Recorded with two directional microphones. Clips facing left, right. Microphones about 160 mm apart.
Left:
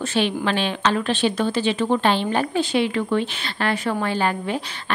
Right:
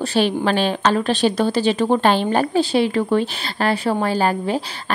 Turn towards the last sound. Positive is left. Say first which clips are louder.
# right 4 dB
turn(degrees=-35)  # may be behind; listen again after turning